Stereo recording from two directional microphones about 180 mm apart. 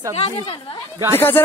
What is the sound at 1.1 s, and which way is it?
Speech, 10° left (ahead or behind).